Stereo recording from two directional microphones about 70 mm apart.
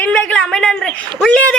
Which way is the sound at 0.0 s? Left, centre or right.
Centre.